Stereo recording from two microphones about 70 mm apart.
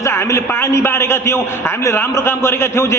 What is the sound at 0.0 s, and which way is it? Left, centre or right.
A man's voice, left.